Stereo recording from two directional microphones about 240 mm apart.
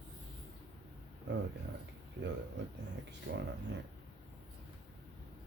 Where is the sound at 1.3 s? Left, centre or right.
Right.